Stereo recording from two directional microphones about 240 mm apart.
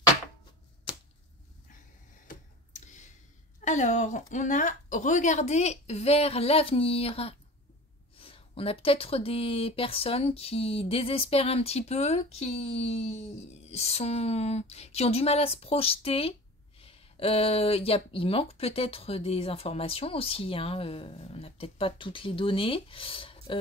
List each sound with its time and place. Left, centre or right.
2.2 s tick-tock: left
3.6 s a woman's voice: left